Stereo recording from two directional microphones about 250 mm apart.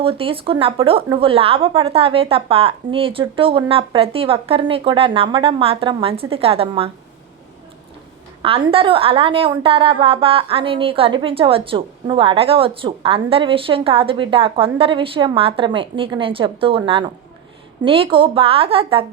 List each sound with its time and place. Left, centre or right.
0.0 s a woman's voice: right
8.4 s a woman's voice: right